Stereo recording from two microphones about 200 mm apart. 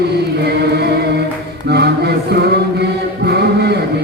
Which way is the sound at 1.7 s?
55° right (ahead or behind).